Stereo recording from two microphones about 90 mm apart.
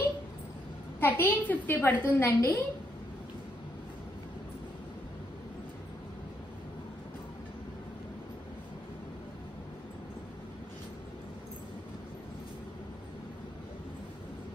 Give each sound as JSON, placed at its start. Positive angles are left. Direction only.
{"t": 1.0, "sound": "a woman's voice", "side_deg": 20}